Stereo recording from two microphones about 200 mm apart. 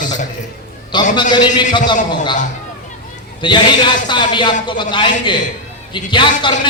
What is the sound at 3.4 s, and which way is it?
A man's voice, 20° left (ahead or behind).